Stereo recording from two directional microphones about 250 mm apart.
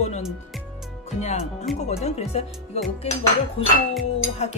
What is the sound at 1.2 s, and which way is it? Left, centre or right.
Speech, left.